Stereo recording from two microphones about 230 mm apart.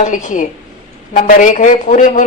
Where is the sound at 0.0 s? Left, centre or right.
Left.